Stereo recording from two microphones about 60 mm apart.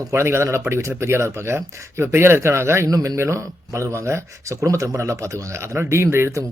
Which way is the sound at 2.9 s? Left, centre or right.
Right.